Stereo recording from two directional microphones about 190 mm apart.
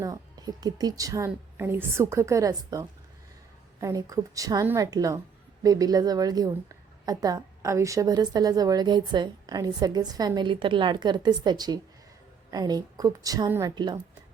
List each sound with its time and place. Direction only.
0.0 s a woman's voice: 20° right (ahead or behind)